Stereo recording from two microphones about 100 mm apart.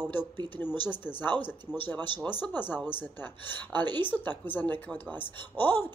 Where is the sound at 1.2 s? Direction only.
50° right (ahead or behind).